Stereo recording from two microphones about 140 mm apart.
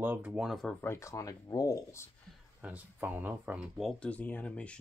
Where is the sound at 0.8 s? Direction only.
20° left (ahead or behind).